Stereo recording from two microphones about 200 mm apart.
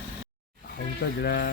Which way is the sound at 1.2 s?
55° left (ahead or behind).